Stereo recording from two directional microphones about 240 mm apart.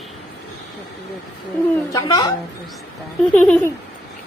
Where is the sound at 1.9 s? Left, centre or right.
Centre.